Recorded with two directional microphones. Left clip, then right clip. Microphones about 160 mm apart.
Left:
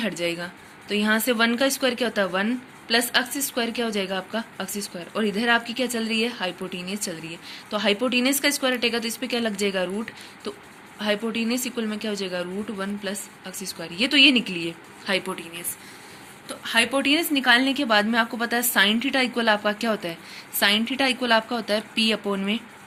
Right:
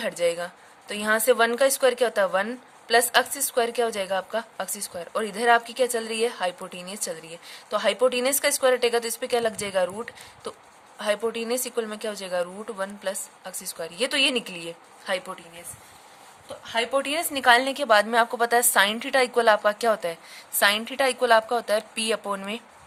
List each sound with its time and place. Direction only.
0.0 s speech: 60° right (ahead or behind)
16.6 s speech: 40° right (ahead or behind); by 22.6 s 60° right (ahead or behind)